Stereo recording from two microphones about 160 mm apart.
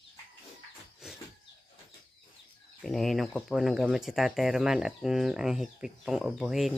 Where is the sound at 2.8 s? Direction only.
Centre (ahead or behind).